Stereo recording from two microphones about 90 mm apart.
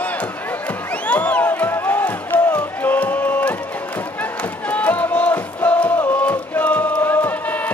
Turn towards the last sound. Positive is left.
turn(degrees=20)  # may be behind; listen again after turning